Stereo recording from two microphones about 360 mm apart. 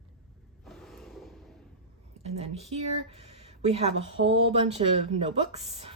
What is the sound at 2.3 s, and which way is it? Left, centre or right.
Speech, centre.